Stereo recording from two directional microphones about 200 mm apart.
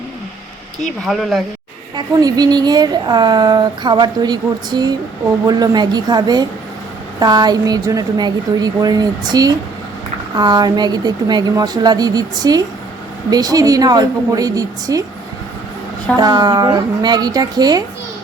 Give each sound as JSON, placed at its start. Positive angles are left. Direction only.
{"t": 1.0, "sound": "speech", "side_deg": 0}
{"t": 2.0, "sound": "a woman's voice", "side_deg": -20}
{"t": 16.2, "sound": "a woman's voice", "side_deg": -20}